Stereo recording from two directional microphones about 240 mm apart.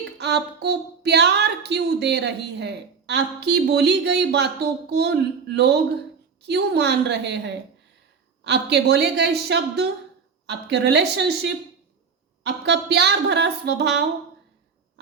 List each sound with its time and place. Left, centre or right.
0.2 s a woman's voice: right